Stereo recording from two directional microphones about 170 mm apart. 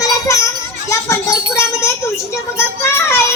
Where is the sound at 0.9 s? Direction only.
20° left (ahead or behind).